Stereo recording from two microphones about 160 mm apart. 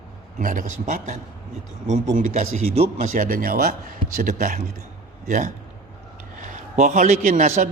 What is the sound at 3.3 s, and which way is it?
A man's voice, 60° right (ahead or behind).